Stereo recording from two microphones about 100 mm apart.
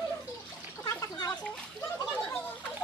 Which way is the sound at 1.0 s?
35° left (ahead or behind).